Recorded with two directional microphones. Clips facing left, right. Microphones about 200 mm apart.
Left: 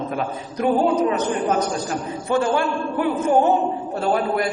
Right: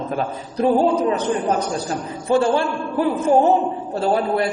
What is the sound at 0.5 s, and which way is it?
A man's voice, 30° right (ahead or behind).